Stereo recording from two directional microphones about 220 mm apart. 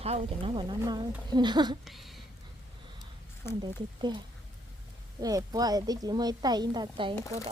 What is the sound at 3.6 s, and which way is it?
Speech, 20° right (ahead or behind).